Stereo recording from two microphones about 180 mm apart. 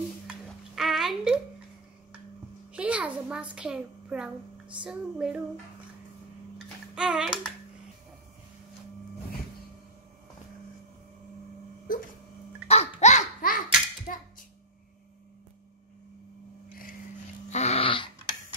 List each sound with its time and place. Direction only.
0.3 s a sound: centre (ahead or behind)
2.7 s a sound: 5° right (ahead or behind)
3.5 s a woman's voice: 5° right (ahead or behind)
7.0 s a woman's voice: 5° right (ahead or behind)
12.6 s laughter: 35° left (ahead or behind)
17.5 s dog: 35° left (ahead or behind)